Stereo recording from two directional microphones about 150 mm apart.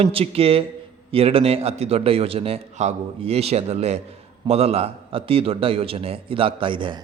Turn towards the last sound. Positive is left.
turn(degrees=-35)  # may be behind; listen again after turning